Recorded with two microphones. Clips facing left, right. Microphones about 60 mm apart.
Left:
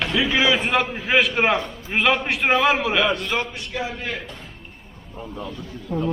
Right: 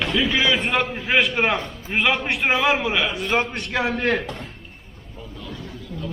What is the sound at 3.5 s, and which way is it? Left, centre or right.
Speech, right.